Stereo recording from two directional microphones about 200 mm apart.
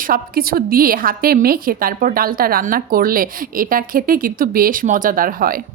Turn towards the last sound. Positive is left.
turn(degrees=-45)  # may be behind; listen again after turning